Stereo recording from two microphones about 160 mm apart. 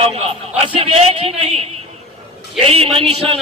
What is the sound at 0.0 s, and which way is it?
A man's voice, 40° right (ahead or behind).